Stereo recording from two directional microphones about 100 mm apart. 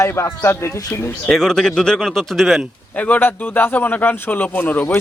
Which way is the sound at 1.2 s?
5° left (ahead or behind).